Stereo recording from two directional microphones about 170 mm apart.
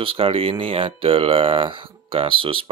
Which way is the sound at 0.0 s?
35° right (ahead or behind).